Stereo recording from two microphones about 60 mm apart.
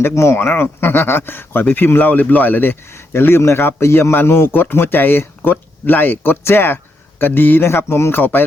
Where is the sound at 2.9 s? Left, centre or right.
Left.